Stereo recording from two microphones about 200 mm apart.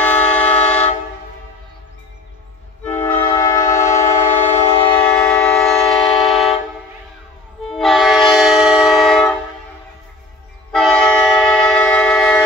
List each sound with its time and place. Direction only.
0.0 s train: 5° left (ahead or behind)
2.8 s train: 10° left (ahead or behind)
4.4 s train: 25° left (ahead or behind)
5.1 s vehicle: 5° left (ahead or behind)
7.7 s train: centre (ahead or behind)
10.7 s train: centre (ahead or behind)